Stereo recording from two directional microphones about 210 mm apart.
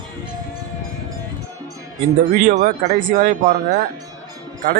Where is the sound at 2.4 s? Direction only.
40° right (ahead or behind).